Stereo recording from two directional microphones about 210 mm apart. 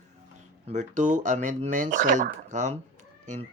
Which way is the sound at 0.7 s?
35° right (ahead or behind).